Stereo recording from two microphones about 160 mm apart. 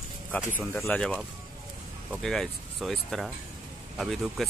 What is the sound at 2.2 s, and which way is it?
Speech, centre (ahead or behind).